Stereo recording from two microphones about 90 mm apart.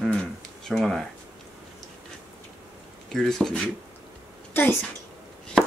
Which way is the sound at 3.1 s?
5° left (ahead or behind).